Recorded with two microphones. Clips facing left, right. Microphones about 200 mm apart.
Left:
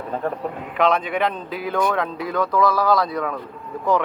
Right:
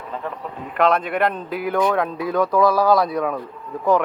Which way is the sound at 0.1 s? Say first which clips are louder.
Left 4 dB; 45° left (ahead or behind).